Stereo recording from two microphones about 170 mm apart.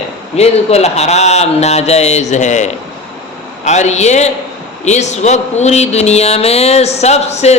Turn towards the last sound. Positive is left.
turn(degrees=40)  # may be behind; listen again after turning